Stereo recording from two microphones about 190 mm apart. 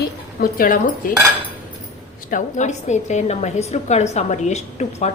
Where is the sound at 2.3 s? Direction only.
40° left (ahead or behind).